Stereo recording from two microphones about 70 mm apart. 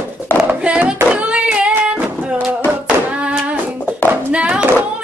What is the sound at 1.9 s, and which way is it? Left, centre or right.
Music, right.